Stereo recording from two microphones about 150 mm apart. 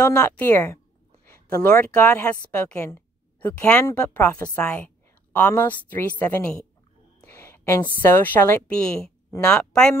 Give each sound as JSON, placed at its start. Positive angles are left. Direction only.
{"t": 0.0, "sound": "a woman's voice", "side_deg": 20}
{"t": 7.2, "sound": "a sound", "side_deg": 15}
{"t": 8.0, "sound": "speech", "side_deg": 15}